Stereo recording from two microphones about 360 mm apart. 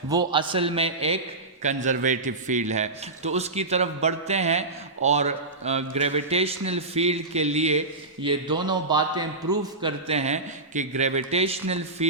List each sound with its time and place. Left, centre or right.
0.1 s a man's voice: centre